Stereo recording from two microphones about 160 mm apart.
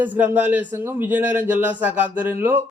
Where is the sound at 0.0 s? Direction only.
10° right (ahead or behind).